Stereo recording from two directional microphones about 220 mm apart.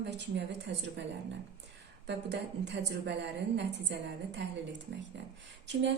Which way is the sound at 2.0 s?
50° right (ahead or behind).